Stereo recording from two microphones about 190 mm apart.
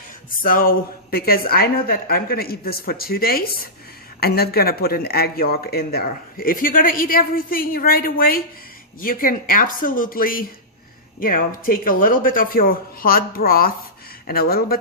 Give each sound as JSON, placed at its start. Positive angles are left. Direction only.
{"t": 0.4, "sound": "speech", "side_deg": 50}